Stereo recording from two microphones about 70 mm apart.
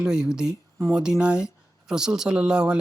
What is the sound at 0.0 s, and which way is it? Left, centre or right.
Speech, centre.